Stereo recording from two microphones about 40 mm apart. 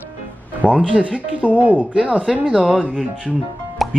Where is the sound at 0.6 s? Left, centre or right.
Left.